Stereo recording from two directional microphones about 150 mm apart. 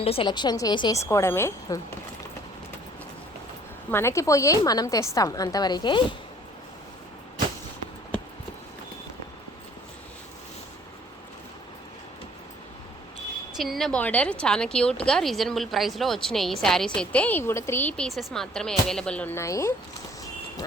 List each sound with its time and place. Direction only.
0.0 s speech: 40° left (ahead or behind)
0.3 s a woman's voice: 30° left (ahead or behind)
3.9 s a woman's voice: 20° left (ahead or behind)
13.6 s a woman's voice: centre (ahead or behind); by 19.7 s 20° left (ahead or behind)